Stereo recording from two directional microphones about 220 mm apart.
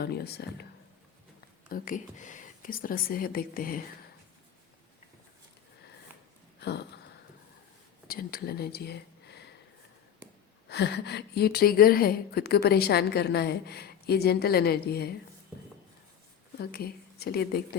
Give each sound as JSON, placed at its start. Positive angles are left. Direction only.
{"t": 0.0, "sound": "a woman's voice", "side_deg": 45}
{"t": 1.7, "sound": "speech", "side_deg": 35}
{"t": 6.6, "sound": "a sound", "side_deg": 50}
{"t": 8.0, "sound": "speech", "side_deg": 40}
{"t": 10.7, "sound": "a woman's voice", "side_deg": 50}
{"t": 16.6, "sound": "speech", "side_deg": 45}